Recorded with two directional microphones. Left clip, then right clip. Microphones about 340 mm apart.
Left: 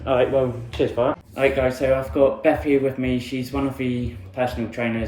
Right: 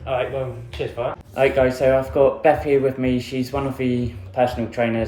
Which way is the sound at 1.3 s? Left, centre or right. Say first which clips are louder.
Right 4 dB; centre.